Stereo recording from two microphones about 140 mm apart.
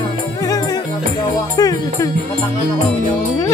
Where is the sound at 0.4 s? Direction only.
25° left (ahead or behind).